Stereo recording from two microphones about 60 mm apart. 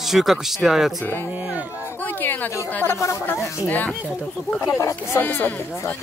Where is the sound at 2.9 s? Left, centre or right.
Left.